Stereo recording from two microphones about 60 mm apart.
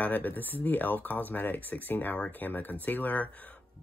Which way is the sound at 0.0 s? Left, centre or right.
Left.